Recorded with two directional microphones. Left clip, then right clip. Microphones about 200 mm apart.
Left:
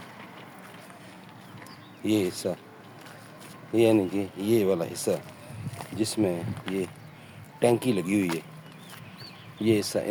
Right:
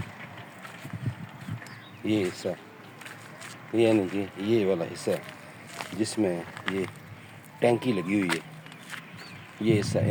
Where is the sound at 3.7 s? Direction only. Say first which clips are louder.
Left 1 dB; 10° left (ahead or behind).